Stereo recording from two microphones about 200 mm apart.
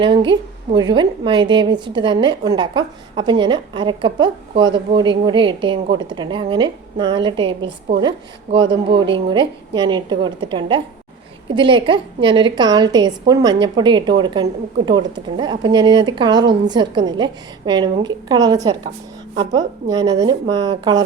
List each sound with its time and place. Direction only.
0.0 s a woman's voice: 25° right (ahead or behind)
8.5 s a woman's voice: 25° right (ahead or behind)